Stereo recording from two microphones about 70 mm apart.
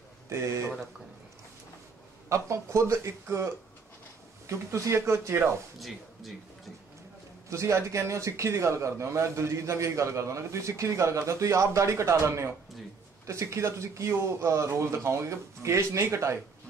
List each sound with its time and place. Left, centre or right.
2.2 s a man's voice: right
5.8 s speech: centre
7.4 s a man's voice: right